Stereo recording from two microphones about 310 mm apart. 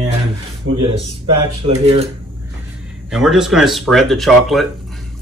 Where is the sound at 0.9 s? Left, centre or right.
Centre.